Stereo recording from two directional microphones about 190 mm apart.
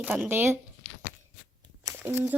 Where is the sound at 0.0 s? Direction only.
10° right (ahead or behind).